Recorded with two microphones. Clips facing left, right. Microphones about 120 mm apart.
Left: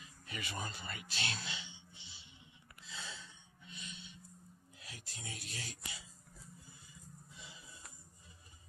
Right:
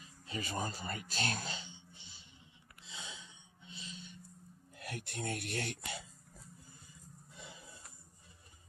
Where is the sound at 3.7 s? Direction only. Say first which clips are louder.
Right 2 dB; 30° right (ahead or behind).